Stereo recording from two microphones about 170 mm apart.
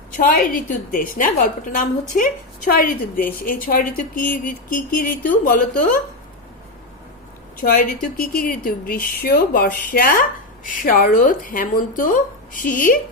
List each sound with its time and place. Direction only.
0.2 s a woman's voice: 55° left (ahead or behind)
7.6 s a woman's voice: 55° left (ahead or behind)